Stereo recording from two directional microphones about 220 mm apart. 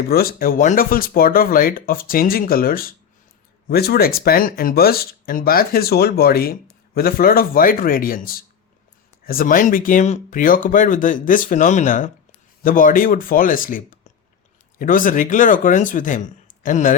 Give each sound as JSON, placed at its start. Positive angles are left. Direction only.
{"t": 0.1, "sound": "speech", "side_deg": 40}